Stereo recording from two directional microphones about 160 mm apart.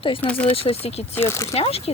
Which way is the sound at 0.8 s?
40° left (ahead or behind).